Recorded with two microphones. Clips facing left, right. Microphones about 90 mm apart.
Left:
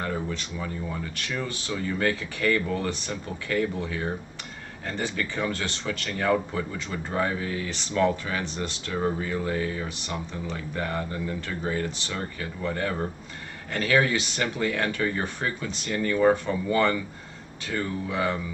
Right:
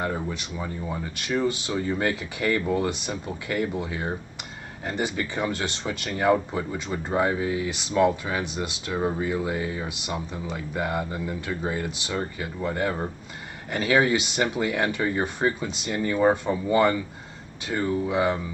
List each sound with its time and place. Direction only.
0.0 s speech: 15° right (ahead or behind)